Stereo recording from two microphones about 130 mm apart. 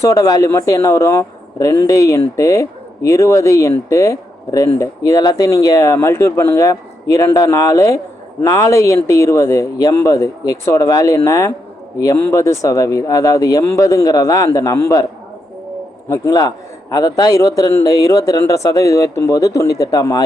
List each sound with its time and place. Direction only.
0.0 s a man's voice: 25° left (ahead or behind)
16.0 s a man's voice: 20° left (ahead or behind)